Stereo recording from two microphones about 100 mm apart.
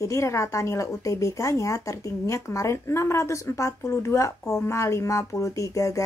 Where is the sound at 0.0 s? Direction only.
30° left (ahead or behind).